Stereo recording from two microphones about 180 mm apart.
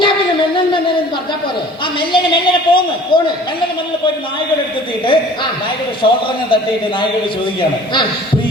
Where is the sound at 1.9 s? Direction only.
25° left (ahead or behind).